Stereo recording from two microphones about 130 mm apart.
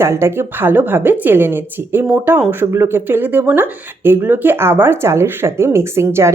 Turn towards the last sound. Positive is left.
turn(degrees=-20)  # may be behind; listen again after turning